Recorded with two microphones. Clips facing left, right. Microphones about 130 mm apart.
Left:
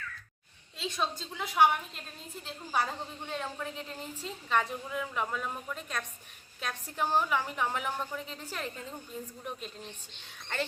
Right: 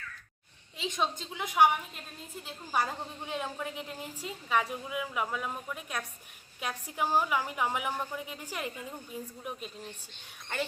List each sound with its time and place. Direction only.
0.8 s a woman's voice: 15° right (ahead or behind)